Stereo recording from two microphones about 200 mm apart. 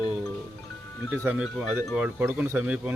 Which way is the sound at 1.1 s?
10° right (ahead or behind).